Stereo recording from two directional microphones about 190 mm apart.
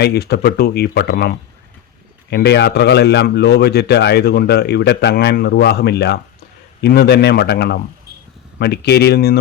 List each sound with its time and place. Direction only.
0.0 s a man's voice: 55° left (ahead or behind)